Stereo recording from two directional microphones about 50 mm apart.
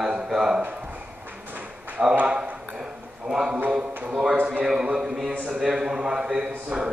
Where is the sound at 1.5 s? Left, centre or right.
Right.